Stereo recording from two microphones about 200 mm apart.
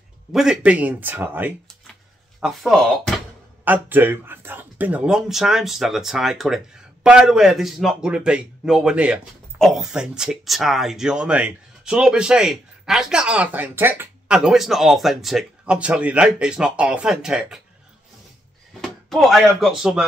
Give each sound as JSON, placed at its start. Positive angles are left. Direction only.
{"t": 0.3, "sound": "speech", "side_deg": -5}
{"t": 18.7, "sound": "speech", "side_deg": 0}